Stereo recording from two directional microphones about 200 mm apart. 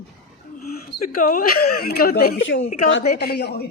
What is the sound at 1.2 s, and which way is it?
A man's voice, 45° left (ahead or behind).